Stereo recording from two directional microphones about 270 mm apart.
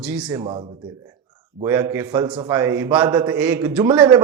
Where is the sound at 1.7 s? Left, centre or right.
Centre.